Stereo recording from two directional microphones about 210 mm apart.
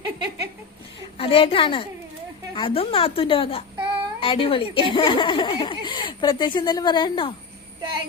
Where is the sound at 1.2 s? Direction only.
25° left (ahead or behind).